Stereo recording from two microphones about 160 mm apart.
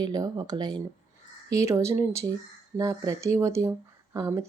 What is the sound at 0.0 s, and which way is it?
Speech, 25° right (ahead or behind).